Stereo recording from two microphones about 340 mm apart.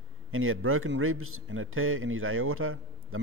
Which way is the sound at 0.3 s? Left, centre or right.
Right.